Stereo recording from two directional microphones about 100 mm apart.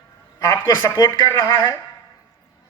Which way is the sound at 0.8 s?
35° left (ahead or behind).